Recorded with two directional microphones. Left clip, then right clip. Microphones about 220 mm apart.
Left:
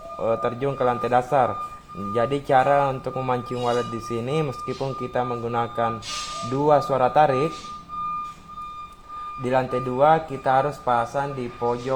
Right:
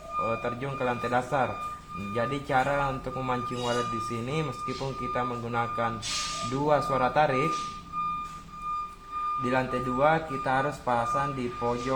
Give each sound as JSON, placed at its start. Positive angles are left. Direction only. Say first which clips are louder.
{"t": 0.2, "sound": "speech", "louder": "left 6 dB", "side_deg": 40}
{"t": 9.4, "sound": "speech", "louder": "left 9 dB", "side_deg": 35}